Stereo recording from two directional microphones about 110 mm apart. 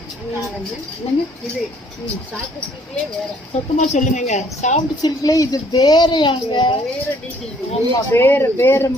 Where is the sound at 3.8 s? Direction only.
90° left.